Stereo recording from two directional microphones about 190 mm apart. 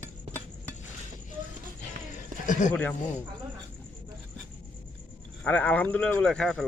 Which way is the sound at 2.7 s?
10° left (ahead or behind).